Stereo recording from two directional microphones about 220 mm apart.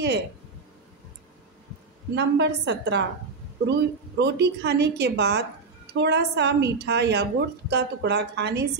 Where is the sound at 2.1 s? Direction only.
50° right (ahead or behind).